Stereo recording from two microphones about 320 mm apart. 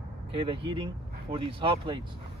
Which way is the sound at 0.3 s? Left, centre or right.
Centre.